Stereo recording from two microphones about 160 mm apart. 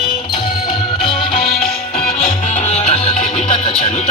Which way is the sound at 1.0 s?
35° left (ahead or behind).